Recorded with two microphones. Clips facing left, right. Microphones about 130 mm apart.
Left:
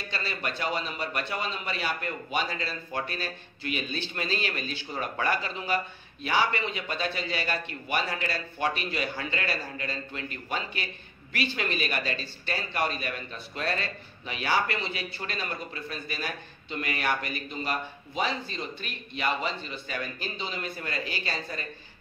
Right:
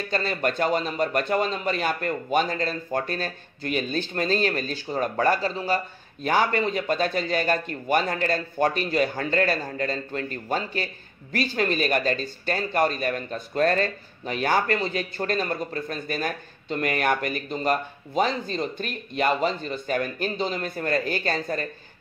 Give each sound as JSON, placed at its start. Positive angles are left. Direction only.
{"t": 0.1, "sound": "a man's voice", "side_deg": -45}